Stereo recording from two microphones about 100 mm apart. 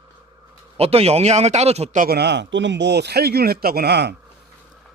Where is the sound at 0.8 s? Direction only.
90° right.